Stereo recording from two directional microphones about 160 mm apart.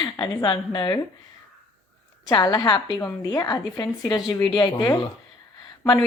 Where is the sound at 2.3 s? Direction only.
30° left (ahead or behind).